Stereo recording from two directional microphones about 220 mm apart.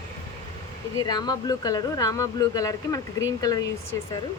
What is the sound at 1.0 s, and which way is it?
Speech, 15° left (ahead or behind).